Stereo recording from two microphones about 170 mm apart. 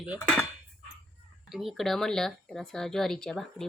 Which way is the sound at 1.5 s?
Centre (ahead or behind).